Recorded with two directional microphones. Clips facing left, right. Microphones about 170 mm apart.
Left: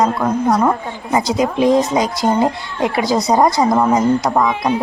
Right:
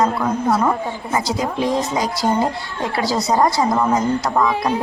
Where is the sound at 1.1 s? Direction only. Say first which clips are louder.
Left 6 dB; 20° left (ahead or behind).